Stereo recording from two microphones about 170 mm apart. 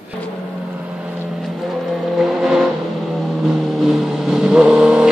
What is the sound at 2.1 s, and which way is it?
Vehicle, centre (ahead or behind).